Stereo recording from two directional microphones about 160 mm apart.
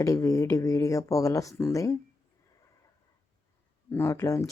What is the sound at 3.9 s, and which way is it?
Speech, 15° left (ahead or behind).